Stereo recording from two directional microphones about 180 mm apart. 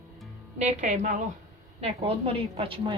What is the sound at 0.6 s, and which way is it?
A woman's voice, 40° right (ahead or behind).